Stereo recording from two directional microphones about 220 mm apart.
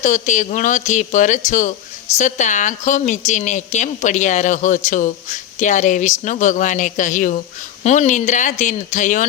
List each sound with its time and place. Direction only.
0.0 s a woman's voice: 35° left (ahead or behind)